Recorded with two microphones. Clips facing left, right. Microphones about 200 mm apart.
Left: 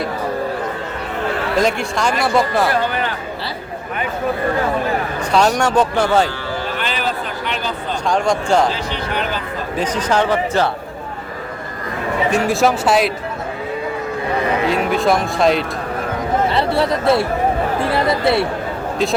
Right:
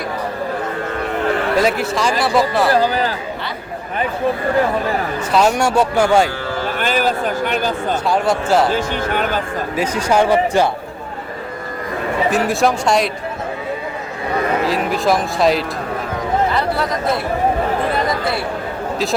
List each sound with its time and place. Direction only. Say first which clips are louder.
1.6 s speech: right 1 dB; centre (ahead or behind)
2.6 s speech: right 3 dB; 35° right (ahead or behind)
5.3 s speech: even; 5° right (ahead or behind)
6.7 s a sound: right 4 dB; 45° right (ahead or behind)
8.0 s speech: left 1 dB; 5° right (ahead or behind)
8.7 s speech: right 4 dB; 50° right (ahead or behind)
9.7 s speech: right 2 dB; 10° right (ahead or behind)
12.3 s speech: left 1 dB; centre (ahead or behind)
14.6 s speech: left 1 dB; centre (ahead or behind)
16.5 s chatter: left 2 dB; 30° left (ahead or behind)
17.9 s speech: left 4 dB; 25° left (ahead or behind)